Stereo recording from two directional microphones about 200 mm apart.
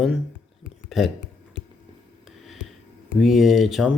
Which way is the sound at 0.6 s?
Centre (ahead or behind).